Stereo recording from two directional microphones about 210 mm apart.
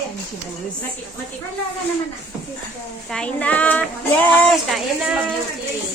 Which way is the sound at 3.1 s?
5° left (ahead or behind).